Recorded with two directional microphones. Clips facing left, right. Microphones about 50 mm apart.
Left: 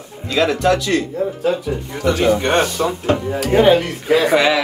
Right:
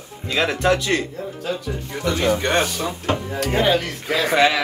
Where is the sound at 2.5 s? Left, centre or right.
Left.